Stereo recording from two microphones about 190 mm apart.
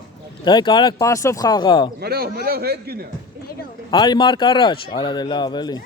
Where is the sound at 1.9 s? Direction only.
55° right (ahead or behind).